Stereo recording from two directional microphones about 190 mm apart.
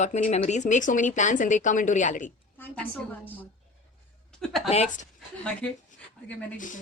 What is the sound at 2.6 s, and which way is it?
A woman's voice, 10° left (ahead or behind).